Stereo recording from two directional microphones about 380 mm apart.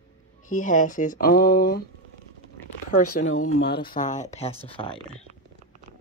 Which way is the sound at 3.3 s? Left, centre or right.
Left.